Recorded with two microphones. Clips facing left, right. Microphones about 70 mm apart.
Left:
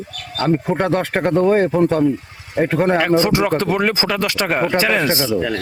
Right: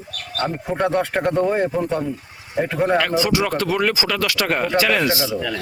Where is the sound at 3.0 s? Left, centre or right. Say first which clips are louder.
Left 4 dB; left.